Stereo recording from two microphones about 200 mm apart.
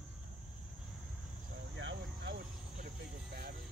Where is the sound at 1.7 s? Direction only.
60° right (ahead or behind).